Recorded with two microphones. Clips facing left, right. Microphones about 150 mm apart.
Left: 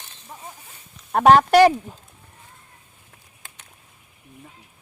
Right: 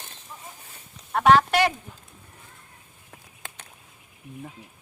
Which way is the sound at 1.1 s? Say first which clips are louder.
Left 5 dB; 45° left (ahead or behind).